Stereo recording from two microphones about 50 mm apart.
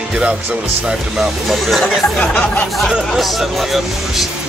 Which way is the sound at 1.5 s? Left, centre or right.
Centre.